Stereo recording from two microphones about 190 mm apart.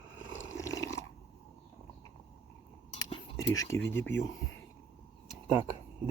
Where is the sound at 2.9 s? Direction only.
30° left (ahead or behind).